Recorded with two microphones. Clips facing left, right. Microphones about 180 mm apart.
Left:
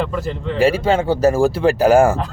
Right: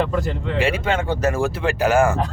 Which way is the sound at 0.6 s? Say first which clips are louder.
Left 7 dB; 35° left (ahead or behind).